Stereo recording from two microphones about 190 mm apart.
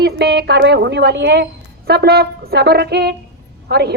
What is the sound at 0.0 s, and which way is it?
A woman's voice, 60° right (ahead or behind).